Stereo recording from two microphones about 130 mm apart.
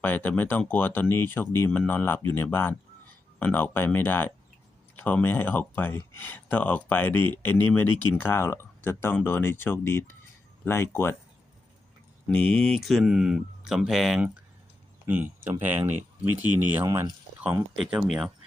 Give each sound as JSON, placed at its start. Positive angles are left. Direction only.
{"t": 0.0, "sound": "speech", "side_deg": 15}
{"t": 12.3, "sound": "speech", "side_deg": 10}
{"t": 15.0, "sound": "speech", "side_deg": -15}
{"t": 17.7, "sound": "speech", "side_deg": -5}